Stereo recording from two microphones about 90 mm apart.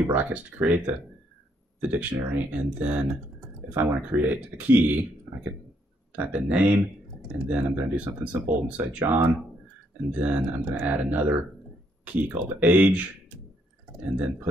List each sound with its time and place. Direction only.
0.0 s speech: 15° right (ahead or behind)
14.1 s speech: 15° right (ahead or behind)